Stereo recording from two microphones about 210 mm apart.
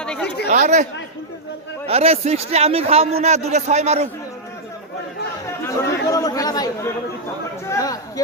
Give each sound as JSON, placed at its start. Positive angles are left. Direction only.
{"t": 0.0, "sound": "chatter", "side_deg": 5}
{"t": 0.5, "sound": "speech", "side_deg": -35}
{"t": 1.9, "sound": "a man's voice", "side_deg": -30}
{"t": 5.5, "sound": "chatter", "side_deg": 15}
{"t": 6.1, "sound": "speech", "side_deg": 15}